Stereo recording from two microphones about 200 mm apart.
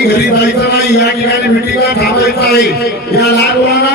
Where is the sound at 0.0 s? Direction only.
55° left (ahead or behind).